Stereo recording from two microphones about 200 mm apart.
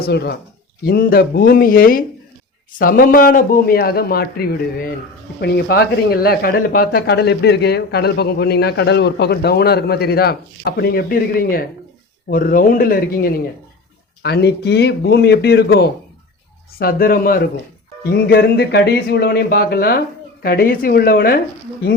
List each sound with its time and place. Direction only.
0.0 s a man's voice: 55° left (ahead or behind)